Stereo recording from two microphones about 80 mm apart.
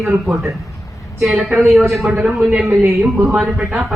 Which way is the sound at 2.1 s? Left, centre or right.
Centre.